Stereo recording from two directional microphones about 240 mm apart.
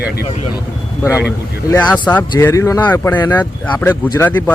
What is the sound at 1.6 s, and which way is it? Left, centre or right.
A man's voice, centre.